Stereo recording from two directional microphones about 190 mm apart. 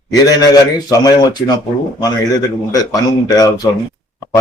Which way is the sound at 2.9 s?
20° left (ahead or behind).